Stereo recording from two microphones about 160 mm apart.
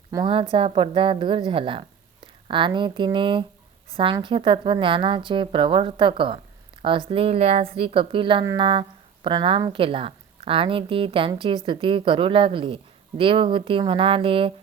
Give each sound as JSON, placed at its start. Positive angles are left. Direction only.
{"t": 0.1, "sound": "speech", "side_deg": -30}